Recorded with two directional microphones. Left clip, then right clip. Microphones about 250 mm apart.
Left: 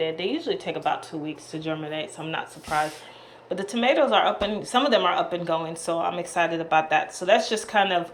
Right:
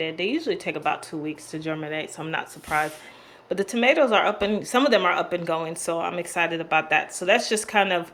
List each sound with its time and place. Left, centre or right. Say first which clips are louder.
0.0 s speech: right 1 dB; centre